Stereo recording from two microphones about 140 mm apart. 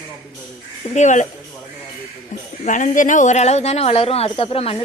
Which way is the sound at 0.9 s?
60° left (ahead or behind).